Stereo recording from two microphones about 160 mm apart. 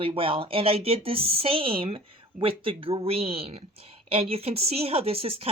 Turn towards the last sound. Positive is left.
turn(degrees=-35)  # may be behind; listen again after turning